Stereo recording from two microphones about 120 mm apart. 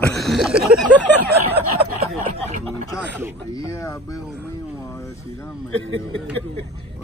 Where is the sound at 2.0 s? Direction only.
65° right (ahead or behind).